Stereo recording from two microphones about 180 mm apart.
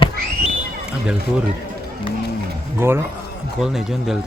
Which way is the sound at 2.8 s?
15° right (ahead or behind).